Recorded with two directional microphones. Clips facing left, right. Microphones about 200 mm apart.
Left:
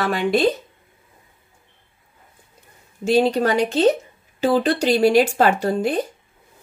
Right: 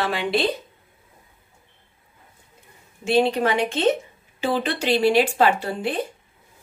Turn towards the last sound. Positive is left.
turn(degrees=40)  # may be behind; listen again after turning